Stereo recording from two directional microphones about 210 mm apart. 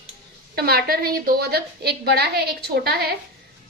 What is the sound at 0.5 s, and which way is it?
A woman's voice, 45° right (ahead or behind).